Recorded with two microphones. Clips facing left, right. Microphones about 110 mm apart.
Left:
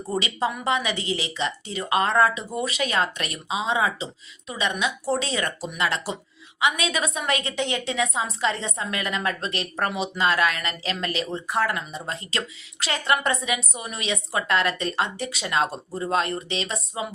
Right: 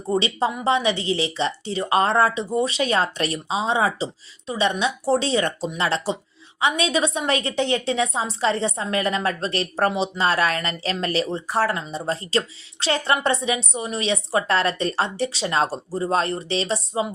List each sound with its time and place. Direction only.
0.1 s a woman's voice: 30° right (ahead or behind)